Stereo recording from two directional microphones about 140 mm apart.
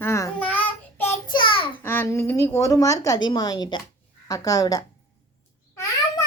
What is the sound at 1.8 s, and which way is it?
A woman's voice, 15° left (ahead or behind).